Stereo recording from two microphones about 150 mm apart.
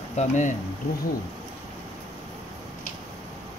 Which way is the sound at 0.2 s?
55° left (ahead or behind).